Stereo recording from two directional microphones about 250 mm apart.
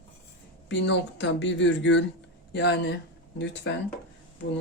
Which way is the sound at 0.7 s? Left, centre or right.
Left.